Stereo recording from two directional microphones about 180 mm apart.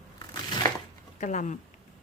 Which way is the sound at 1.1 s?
45° left (ahead or behind).